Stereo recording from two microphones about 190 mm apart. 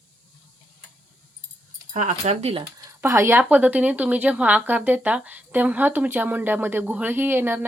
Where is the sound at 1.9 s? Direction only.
40° right (ahead or behind).